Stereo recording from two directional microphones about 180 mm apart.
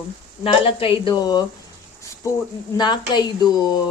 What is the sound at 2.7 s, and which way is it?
Speech, 25° left (ahead or behind).